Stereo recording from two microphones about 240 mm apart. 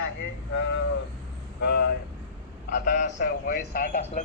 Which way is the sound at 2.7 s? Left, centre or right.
Left.